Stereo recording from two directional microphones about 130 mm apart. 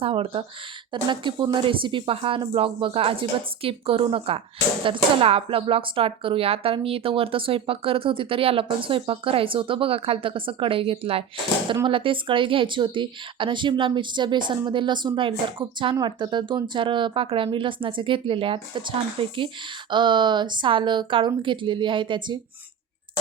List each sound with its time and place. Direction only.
0.0 s a woman's voice: 45° right (ahead or behind)